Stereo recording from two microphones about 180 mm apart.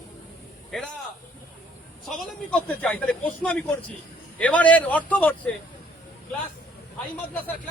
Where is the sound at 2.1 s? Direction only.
Centre (ahead or behind).